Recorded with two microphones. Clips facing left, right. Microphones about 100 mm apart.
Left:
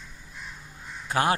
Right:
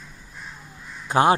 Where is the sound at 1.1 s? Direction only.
25° right (ahead or behind).